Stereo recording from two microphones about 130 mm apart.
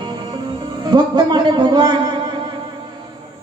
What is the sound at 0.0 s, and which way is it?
Music, 35° right (ahead or behind).